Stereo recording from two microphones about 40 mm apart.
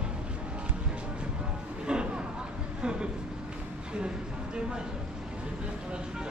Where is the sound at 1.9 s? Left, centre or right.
Right.